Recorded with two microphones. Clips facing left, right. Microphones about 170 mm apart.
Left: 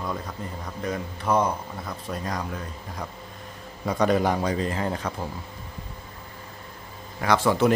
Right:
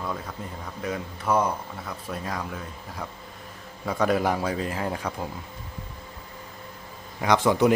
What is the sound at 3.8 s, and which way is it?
A man's voice, 5° right (ahead or behind).